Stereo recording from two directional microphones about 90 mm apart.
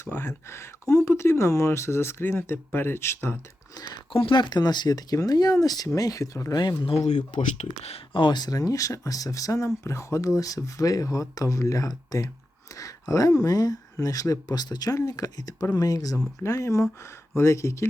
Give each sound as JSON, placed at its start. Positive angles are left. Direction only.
{"t": 0.0, "sound": "speech", "side_deg": 25}
{"t": 3.8, "sound": "speech", "side_deg": 50}
{"t": 4.1, "sound": "speech", "side_deg": 80}
{"t": 6.8, "sound": "speech", "side_deg": 85}
{"t": 7.9, "sound": "speech", "side_deg": 65}
{"t": 14.9, "sound": "speech", "side_deg": 40}